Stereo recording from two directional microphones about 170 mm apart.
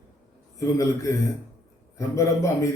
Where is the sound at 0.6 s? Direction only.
20° left (ahead or behind).